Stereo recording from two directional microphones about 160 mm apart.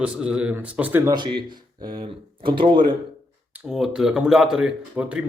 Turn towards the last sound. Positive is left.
turn(degrees=-5)  # may be behind; listen again after turning